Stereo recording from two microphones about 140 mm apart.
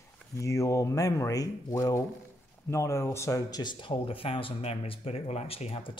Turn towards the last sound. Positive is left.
turn(degrees=40)  # may be behind; listen again after turning